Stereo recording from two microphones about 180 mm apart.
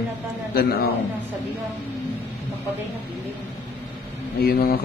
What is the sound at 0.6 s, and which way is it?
Speech, 60° left (ahead or behind).